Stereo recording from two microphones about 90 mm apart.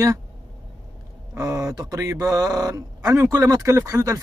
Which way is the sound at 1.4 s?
35° right (ahead or behind).